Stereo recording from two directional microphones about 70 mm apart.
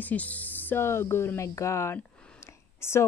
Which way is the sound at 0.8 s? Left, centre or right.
Left.